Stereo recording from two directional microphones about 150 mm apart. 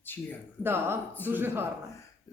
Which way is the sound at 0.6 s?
15° right (ahead or behind).